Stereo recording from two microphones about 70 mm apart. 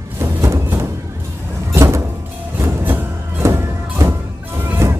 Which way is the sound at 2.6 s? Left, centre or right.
Right.